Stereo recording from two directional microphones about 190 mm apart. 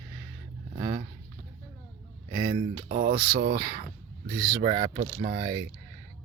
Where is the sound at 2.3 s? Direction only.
20° right (ahead or behind).